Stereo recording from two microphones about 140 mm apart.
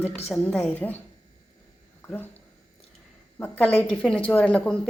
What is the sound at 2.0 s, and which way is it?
Speech, 15° left (ahead or behind).